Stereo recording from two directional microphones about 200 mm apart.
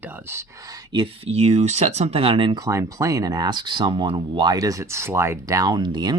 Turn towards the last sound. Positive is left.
turn(degrees=-20)  # may be behind; listen again after turning